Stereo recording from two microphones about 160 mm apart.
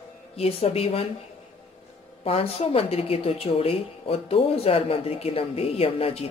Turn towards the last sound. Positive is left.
turn(degrees=35)  # may be behind; listen again after turning